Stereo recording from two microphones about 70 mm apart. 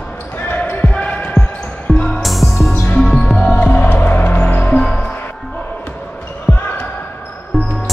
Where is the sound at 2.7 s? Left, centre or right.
Left.